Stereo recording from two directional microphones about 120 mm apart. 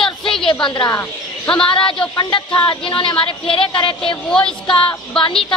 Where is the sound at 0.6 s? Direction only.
30° left (ahead or behind).